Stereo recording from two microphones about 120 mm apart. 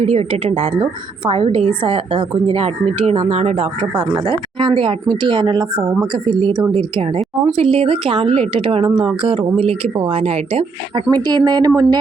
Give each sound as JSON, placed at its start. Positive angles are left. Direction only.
{"t": 0.0, "sound": "a woman's voice", "side_deg": -60}
{"t": 4.6, "sound": "speech", "side_deg": -45}
{"t": 7.2, "sound": "a woman's voice", "side_deg": -55}
{"t": 10.9, "sound": "speech", "side_deg": -35}